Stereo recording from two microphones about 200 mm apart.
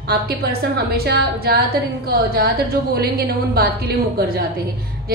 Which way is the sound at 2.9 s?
50° right (ahead or behind).